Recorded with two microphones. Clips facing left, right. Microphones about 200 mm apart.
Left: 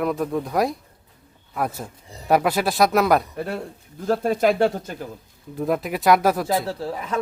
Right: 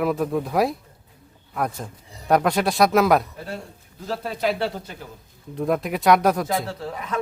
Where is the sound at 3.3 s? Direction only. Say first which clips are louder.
Left 6 dB; 60° left (ahead or behind).